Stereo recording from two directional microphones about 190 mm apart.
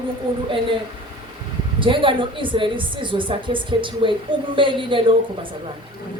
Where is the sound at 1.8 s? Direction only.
25° right (ahead or behind).